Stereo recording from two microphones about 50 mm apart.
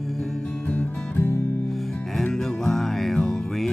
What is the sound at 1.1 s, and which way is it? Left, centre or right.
Music, left.